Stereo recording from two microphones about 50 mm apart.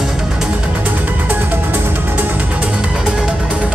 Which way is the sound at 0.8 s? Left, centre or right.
Right.